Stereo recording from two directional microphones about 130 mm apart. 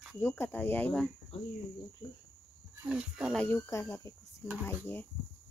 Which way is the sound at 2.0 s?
35° left (ahead or behind).